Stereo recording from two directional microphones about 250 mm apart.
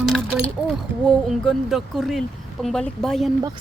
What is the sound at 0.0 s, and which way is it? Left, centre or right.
Keys jangling, centre.